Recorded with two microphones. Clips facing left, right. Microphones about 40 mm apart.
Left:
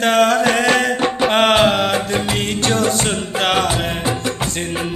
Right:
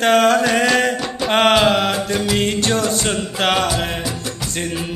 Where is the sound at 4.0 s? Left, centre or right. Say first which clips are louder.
Left 5 dB; left.